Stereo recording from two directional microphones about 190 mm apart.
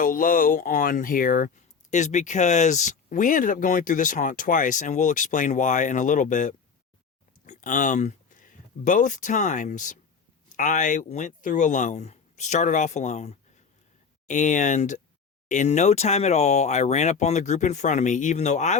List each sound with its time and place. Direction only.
0.0 s speech: 45° left (ahead or behind)